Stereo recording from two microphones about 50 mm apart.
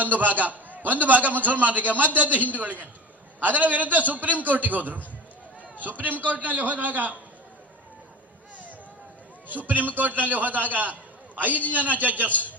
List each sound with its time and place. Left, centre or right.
0.0 s a man's voice: right
9.5 s a man's voice: right